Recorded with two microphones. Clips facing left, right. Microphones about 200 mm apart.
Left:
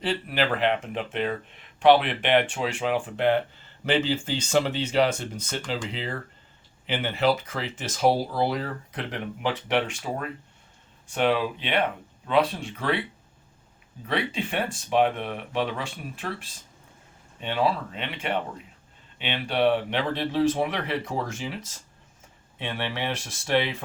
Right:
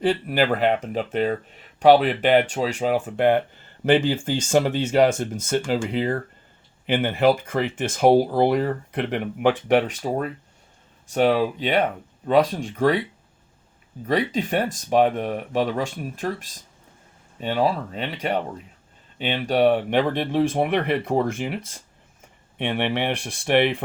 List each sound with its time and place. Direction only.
0.0 s speech: 45° right (ahead or behind)
14.1 s speech: 40° right (ahead or behind); by 23.7 s 60° right (ahead or behind)